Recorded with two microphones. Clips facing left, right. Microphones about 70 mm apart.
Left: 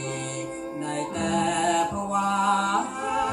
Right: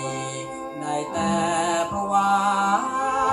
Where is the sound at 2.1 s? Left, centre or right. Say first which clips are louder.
Right 9 dB; right.